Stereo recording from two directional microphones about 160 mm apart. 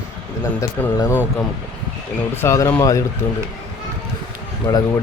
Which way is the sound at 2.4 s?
20° left (ahead or behind).